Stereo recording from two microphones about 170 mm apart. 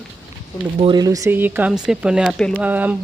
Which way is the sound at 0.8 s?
25° right (ahead or behind).